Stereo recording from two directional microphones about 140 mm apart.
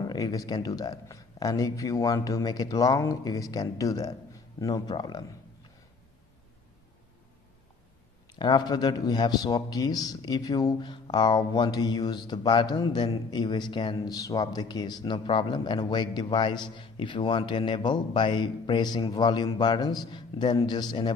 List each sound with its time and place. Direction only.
0.0 s speech: 25° left (ahead or behind)
8.4 s a man's voice: 30° left (ahead or behind)